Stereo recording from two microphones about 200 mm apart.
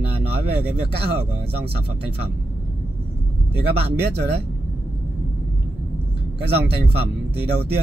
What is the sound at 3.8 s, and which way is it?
Speech, 55° right (ahead or behind).